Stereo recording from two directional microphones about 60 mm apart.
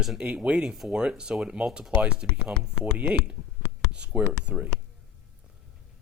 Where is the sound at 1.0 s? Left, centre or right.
Centre.